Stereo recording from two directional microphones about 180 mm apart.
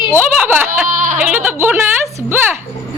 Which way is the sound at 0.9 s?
45° right (ahead or behind).